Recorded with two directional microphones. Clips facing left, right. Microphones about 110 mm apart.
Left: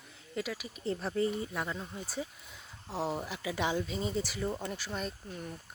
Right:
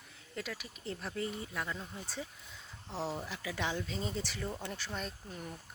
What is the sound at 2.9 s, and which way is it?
Speech, 10° left (ahead or behind).